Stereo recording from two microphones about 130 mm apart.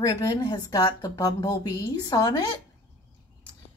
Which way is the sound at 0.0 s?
30° left (ahead or behind).